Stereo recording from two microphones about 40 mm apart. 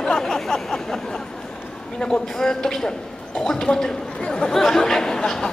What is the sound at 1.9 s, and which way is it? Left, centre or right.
Speech, centre.